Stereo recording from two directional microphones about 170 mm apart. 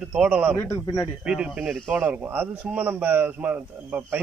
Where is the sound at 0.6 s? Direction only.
20° left (ahead or behind).